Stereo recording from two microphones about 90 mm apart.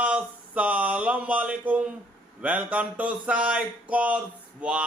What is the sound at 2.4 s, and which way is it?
Speech, 15° right (ahead or behind).